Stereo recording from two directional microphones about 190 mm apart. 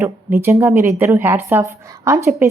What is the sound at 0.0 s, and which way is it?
A woman's voice, 10° right (ahead or behind).